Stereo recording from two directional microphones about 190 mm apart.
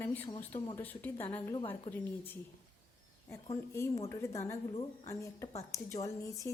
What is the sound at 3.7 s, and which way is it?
Speech, 15° left (ahead or behind).